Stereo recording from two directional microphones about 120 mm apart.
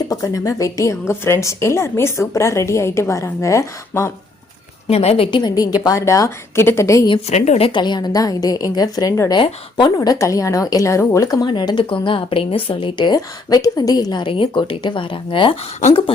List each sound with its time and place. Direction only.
0.1 s a woman's voice: 30° left (ahead or behind)
4.9 s a woman's voice: 60° left (ahead or behind); by 7.1 s 25° left (ahead or behind)
7.3 s a woman's voice: 65° left (ahead or behind)
7.7 s a woman's voice: 40° left (ahead or behind)
9.3 s a woman's voice: 40° left (ahead or behind)
11.4 s a woman's voice: 40° left (ahead or behind)